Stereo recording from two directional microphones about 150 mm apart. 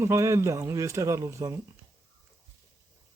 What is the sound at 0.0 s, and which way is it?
Speech, 20° right (ahead or behind).